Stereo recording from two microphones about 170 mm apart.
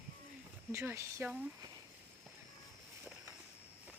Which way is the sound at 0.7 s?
15° right (ahead or behind).